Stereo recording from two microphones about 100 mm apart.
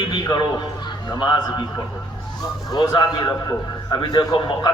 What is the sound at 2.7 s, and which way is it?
A man's voice, 45° left (ahead or behind).